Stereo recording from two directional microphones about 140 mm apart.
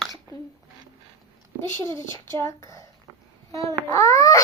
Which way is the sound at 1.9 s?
20° left (ahead or behind).